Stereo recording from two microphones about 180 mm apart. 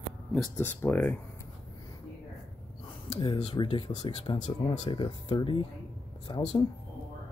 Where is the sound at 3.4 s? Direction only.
35° left (ahead or behind).